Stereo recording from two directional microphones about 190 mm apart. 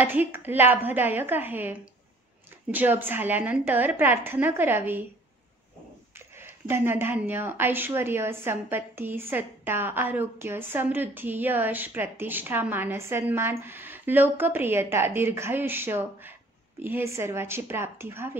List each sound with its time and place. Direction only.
0.0 s a woman's voice: 10° right (ahead or behind)
6.1 s a woman's voice: 10° right (ahead or behind)